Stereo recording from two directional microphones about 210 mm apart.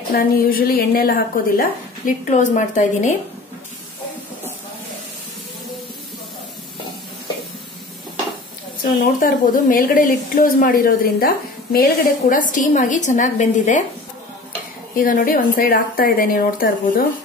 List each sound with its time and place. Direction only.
0.1 s a woman's voice: 45° left (ahead or behind)
9.2 s speech: 40° left (ahead or behind)
15.0 s a woman's voice: 40° left (ahead or behind)